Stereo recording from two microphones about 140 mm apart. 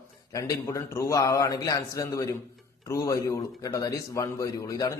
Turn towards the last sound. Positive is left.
turn(degrees=25)  # may be behind; listen again after turning